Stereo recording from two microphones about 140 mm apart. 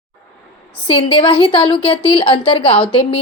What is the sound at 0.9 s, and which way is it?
A woman's voice, 40° left (ahead or behind).